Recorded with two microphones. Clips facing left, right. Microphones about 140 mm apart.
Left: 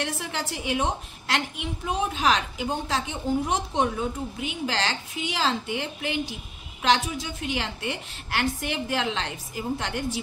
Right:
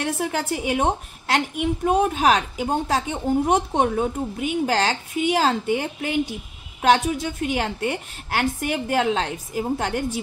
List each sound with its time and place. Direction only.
0.0 s a woman's voice: 50° right (ahead or behind)